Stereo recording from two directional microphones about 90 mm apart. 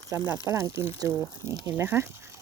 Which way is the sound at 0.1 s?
30° right (ahead or behind).